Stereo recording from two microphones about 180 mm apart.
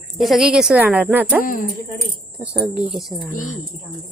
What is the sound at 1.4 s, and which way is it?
Speech, 50° left (ahead or behind).